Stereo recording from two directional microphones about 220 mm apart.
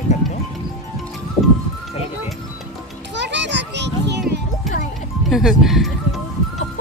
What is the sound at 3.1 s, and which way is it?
Children playing, 55° right (ahead or behind).